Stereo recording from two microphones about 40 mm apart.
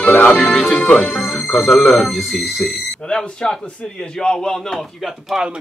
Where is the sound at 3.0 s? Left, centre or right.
Left.